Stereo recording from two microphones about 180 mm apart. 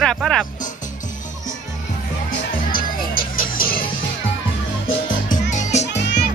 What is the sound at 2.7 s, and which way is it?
Music, 50° left (ahead or behind).